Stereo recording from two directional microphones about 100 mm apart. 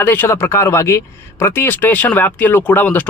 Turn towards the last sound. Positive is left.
turn(degrees=15)  # may be behind; listen again after turning